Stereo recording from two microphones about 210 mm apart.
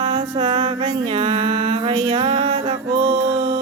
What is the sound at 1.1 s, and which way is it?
Music, 25° right (ahead or behind).